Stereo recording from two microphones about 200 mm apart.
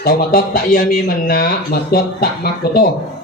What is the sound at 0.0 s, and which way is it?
Speech, 50° left (ahead or behind).